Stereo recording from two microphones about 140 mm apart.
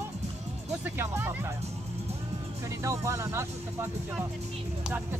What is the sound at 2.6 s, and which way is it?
Speech, 20° right (ahead or behind).